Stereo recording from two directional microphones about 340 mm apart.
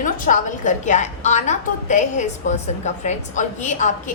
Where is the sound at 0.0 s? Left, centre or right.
Left.